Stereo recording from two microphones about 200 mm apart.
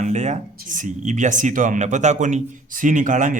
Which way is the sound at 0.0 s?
35° right (ahead or behind).